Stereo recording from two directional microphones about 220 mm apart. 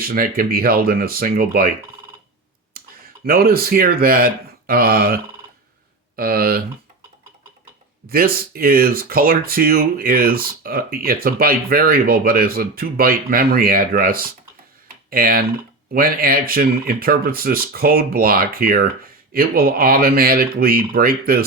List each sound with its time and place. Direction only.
0.0 s speech: 40° right (ahead or behind)
2.8 s clicking: 40° right (ahead or behind)
3.2 s speech: 45° right (ahead or behind)
8.1 s speech: 40° right (ahead or behind)